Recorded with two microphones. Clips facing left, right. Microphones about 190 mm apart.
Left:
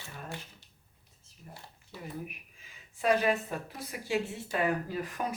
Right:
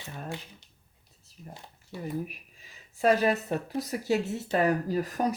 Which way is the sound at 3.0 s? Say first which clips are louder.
Right 3 dB; 40° right (ahead or behind).